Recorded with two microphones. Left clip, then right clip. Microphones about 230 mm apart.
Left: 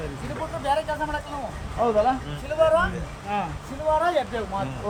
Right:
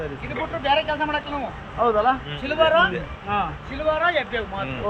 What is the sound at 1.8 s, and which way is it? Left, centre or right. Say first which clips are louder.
Speech: right 2 dB; centre.